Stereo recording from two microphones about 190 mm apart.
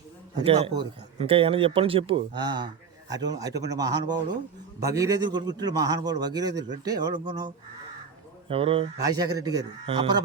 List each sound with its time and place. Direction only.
0.3 s a man's voice: 30° right (ahead or behind)
8.4 s a man's voice: 30° right (ahead or behind)